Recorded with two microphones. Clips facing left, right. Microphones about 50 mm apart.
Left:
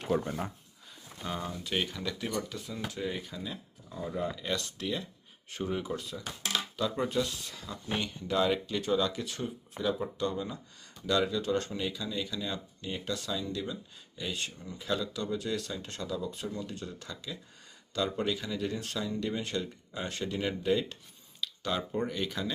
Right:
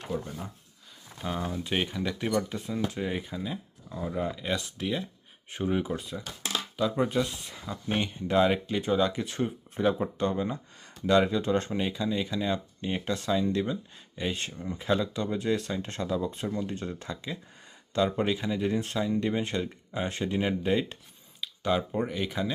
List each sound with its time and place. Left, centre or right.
0.2 s speech: left
1.6 s speech: right
6.7 s speech: centre; by 21.0 s right
21.4 s speech: centre